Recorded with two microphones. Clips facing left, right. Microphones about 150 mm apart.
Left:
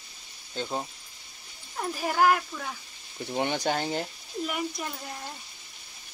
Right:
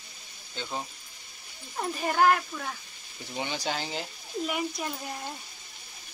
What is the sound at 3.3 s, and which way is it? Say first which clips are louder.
Speech: left 5 dB; 60° left (ahead or behind).